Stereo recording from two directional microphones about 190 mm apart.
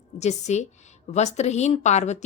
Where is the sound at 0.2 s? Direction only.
35° left (ahead or behind).